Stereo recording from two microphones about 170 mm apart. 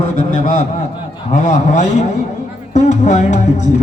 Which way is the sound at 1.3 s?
45° left (ahead or behind).